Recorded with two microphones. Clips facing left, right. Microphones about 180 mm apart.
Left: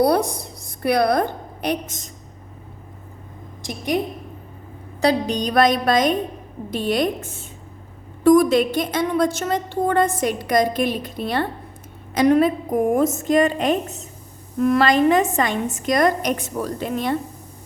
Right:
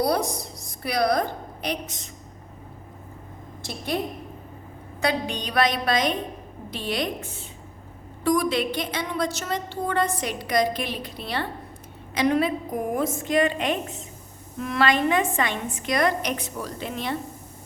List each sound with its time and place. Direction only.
0.0 s a woman's voice: 60° left (ahead or behind)
3.6 s a woman's voice: 15° left (ahead or behind)
4.9 s a woman's voice: 35° left (ahead or behind)